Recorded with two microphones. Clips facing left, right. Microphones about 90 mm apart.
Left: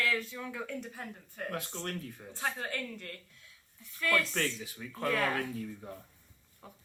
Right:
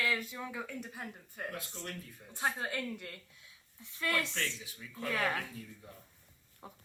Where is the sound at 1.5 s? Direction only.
60° left (ahead or behind).